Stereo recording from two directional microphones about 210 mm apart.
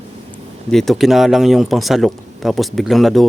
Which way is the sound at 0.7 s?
Centre (ahead or behind).